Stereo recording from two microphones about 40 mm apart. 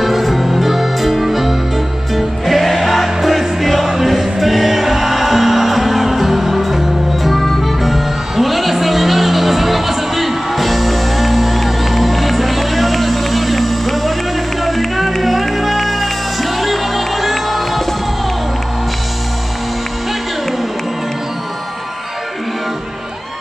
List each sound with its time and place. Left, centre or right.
0.0 s music: centre